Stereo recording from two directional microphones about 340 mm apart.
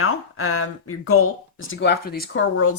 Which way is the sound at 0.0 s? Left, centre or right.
Left.